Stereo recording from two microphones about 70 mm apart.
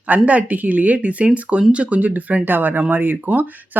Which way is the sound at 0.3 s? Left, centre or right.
Right.